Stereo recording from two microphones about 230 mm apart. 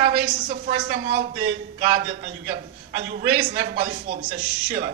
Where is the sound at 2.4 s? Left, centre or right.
Right.